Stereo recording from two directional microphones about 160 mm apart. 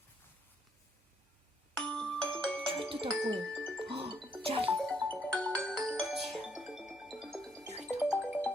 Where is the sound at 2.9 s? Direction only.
35° right (ahead or behind).